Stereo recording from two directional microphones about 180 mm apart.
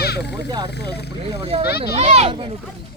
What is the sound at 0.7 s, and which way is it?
Speech, 65° left (ahead or behind).